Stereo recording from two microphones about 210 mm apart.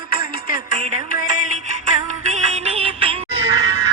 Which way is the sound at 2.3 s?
30° right (ahead or behind).